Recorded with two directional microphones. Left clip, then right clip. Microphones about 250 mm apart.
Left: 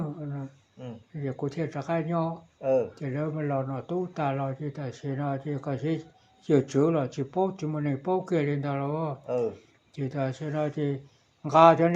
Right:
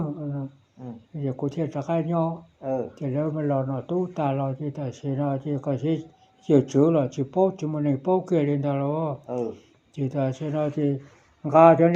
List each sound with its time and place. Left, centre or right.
1.1 s a sound: centre
1.5 s speech: centre
2.6 s speech: left
2.9 s speech: centre
9.2 s speech: left
9.9 s speech: centre